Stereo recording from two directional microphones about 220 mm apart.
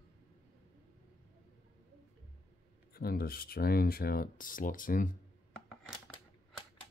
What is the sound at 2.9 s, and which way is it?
Speech, 45° left (ahead or behind).